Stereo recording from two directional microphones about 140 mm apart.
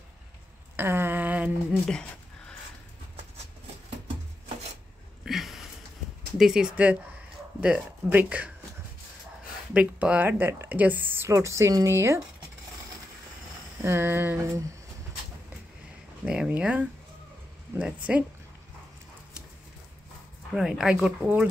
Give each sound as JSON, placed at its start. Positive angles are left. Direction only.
{"t": 0.7, "sound": "a sound", "side_deg": -15}
{"t": 5.2, "sound": "a sound", "side_deg": 0}
{"t": 6.3, "sound": "speech", "side_deg": -5}
{"t": 9.8, "sound": "speech", "side_deg": -10}
{"t": 13.7, "sound": "speech", "side_deg": -20}
{"t": 16.3, "sound": "speech", "side_deg": -5}
{"t": 18.1, "sound": "speech", "side_deg": -5}
{"t": 20.5, "sound": "speech", "side_deg": -5}